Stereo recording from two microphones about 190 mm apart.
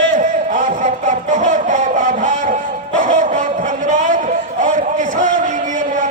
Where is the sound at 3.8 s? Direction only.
40° right (ahead or behind).